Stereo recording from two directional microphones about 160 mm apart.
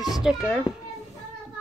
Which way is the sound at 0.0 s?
5° right (ahead or behind).